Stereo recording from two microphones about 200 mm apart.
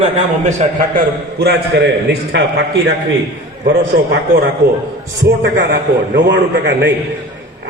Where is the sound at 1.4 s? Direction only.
55° right (ahead or behind).